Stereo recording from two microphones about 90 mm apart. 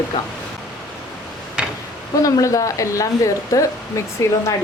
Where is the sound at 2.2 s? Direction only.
40° left (ahead or behind).